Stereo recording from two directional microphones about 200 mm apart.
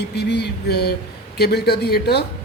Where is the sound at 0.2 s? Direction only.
55° left (ahead or behind).